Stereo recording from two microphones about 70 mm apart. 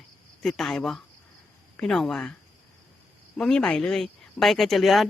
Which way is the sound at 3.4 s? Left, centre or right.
Centre.